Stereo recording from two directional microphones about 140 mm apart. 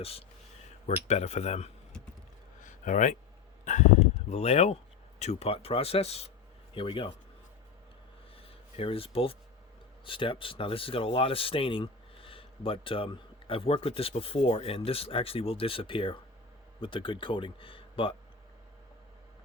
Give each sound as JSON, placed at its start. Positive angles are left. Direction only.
{"t": 0.0, "sound": "speech", "side_deg": 45}
{"t": 2.6, "sound": "a sound", "side_deg": 65}
{"t": 3.6, "sound": "speech", "side_deg": 60}
{"t": 8.4, "sound": "speech", "side_deg": 40}